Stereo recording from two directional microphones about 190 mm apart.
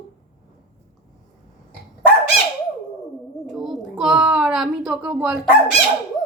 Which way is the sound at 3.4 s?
Centre (ahead or behind).